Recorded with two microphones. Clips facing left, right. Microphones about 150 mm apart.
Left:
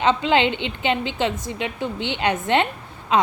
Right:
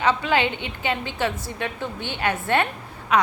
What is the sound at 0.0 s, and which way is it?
A woman's voice, 20° left (ahead or behind).